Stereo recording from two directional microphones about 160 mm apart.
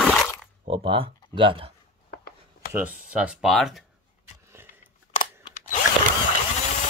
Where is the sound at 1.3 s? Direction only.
30° right (ahead or behind).